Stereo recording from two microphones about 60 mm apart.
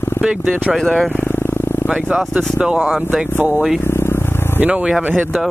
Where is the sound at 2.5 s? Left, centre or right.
Centre.